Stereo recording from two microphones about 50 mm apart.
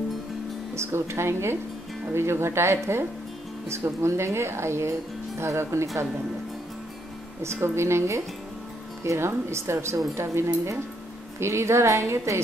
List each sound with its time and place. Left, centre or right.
0.7 s a woman's voice: right
7.4 s a woman's voice: right